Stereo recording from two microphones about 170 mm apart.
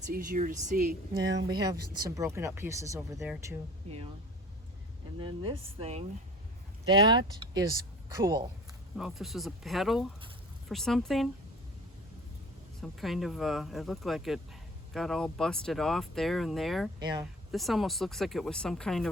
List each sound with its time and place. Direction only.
0.0 s speech: 55° right (ahead or behind)
1.2 s speech: 90° right
1.5 s speech: 25° right (ahead or behind)
3.8 s speech: 35° right (ahead or behind)
5.2 s speech: 30° right (ahead or behind)
9.0 s speech: centre (ahead or behind)
12.8 s speech: centre (ahead or behind)
17.0 s speech: 25° right (ahead or behind)
17.5 s speech: centre (ahead or behind)